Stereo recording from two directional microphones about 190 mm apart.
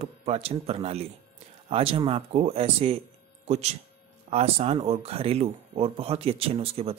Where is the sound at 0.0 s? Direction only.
30° right (ahead or behind).